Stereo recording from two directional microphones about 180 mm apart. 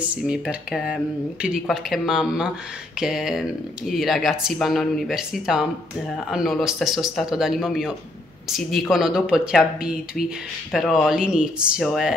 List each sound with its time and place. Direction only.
0.0 s speech: 5° right (ahead or behind)